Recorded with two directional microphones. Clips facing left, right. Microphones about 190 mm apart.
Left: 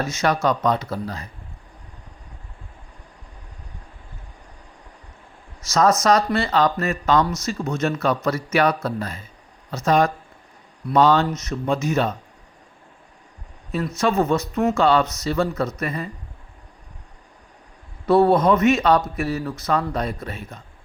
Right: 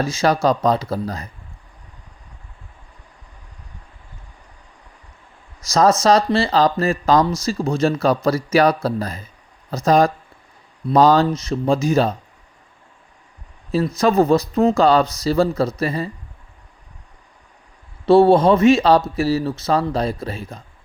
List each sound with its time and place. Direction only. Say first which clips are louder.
0.0 s speech: right 3 dB; 30° right (ahead or behind)
5.6 s speech: right 3 dB; 35° right (ahead or behind)
13.9 s speech: right 4 dB; 35° right (ahead or behind)
18.0 s a man's voice: right 4 dB; 30° right (ahead or behind)